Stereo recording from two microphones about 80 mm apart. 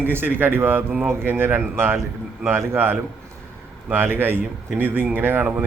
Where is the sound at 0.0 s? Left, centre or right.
Right.